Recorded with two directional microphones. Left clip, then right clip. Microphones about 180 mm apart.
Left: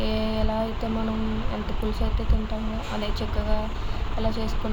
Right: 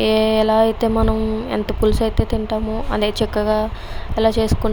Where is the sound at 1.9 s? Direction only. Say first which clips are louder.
Right 12 dB; 65° right (ahead or behind).